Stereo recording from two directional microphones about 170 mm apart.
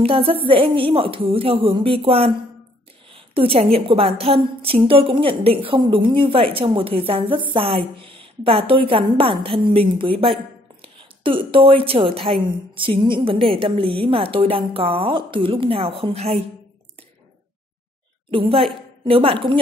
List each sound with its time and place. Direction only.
0.0 s a woman's voice: 35° right (ahead or behind)
18.3 s a woman's voice: 30° right (ahead or behind)